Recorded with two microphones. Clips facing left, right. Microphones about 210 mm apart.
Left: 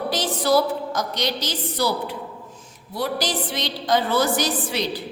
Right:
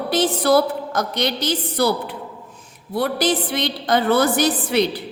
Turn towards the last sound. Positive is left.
turn(degrees=-60)  # may be behind; listen again after turning